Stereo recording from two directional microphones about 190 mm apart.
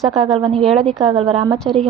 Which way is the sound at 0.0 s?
Centre (ahead or behind).